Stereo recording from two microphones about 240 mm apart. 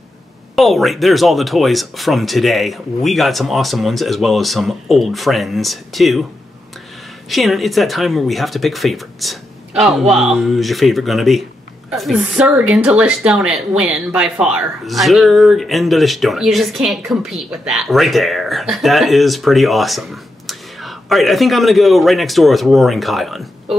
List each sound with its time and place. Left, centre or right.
0.6 s speech: centre
7.2 s speech: centre